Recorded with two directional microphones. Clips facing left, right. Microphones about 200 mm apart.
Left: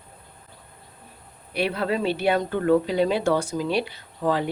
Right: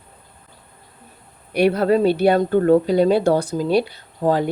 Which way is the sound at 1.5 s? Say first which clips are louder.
Right 9 dB; 45° right (ahead or behind).